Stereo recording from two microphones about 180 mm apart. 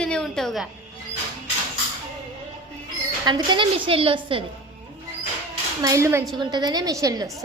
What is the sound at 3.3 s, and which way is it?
A woman's voice, 25° right (ahead or behind).